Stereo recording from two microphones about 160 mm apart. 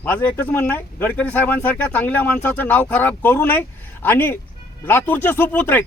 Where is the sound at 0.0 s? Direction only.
10° left (ahead or behind).